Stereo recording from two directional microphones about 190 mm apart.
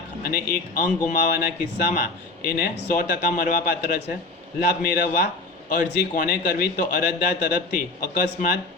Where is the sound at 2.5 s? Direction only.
50° left (ahead or behind).